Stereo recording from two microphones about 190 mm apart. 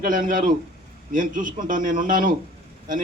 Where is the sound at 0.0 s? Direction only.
45° right (ahead or behind).